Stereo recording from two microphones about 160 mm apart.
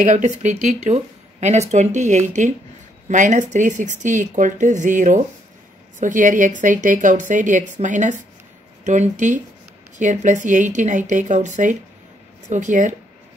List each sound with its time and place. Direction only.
0.0 s speech: 50° right (ahead or behind)